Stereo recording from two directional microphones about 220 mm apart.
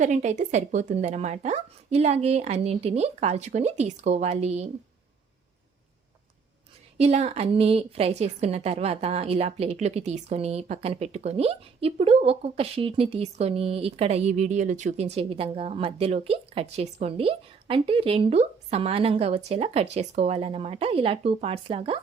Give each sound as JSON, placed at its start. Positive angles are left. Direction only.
{"t": 0.0, "sound": "a woman's voice", "side_deg": -35}
{"t": 7.0, "sound": "a woman's voice", "side_deg": -30}